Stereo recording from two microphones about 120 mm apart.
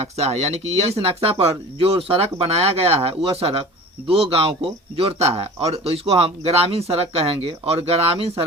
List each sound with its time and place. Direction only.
0.0 s speech: 60° right (ahead or behind)